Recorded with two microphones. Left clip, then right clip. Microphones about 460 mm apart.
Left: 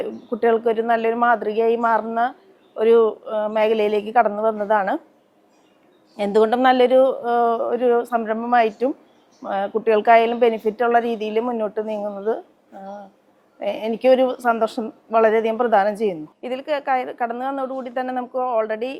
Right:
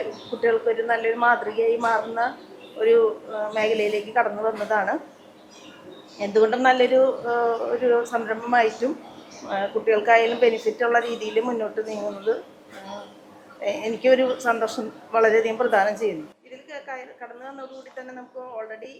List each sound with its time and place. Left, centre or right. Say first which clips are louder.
0.4 s a woman's voice: left 3 dB; left
6.1 s a woman's voice: left 3 dB; left
13.6 s speech: left 3 dB; left
16.5 s a woman's voice: left 17 dB; left